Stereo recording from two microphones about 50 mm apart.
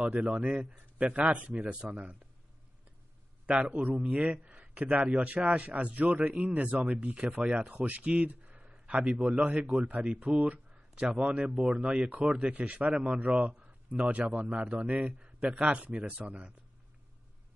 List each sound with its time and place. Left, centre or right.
0.1 s speech: centre
3.4 s speech: right
7.7 s speech: right
8.7 s a sound: centre
9.1 s speech: right
11.8 s speech: centre
12.1 s a man's voice: right